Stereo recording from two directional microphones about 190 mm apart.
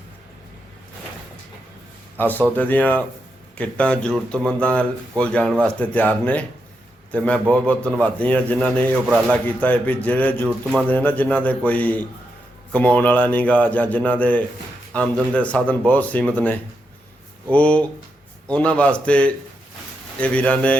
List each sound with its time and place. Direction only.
2.1 s a man's voice: 10° left (ahead or behind)